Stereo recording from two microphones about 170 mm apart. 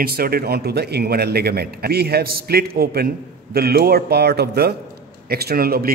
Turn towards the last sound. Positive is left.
turn(degrees=-60)  # may be behind; listen again after turning